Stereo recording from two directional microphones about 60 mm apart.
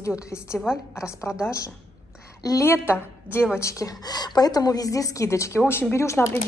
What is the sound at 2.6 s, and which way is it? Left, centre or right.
Speech, left.